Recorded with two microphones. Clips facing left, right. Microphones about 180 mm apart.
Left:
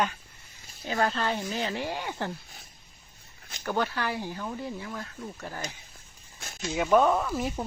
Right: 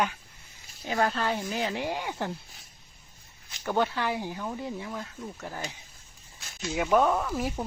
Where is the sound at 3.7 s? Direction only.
20° right (ahead or behind).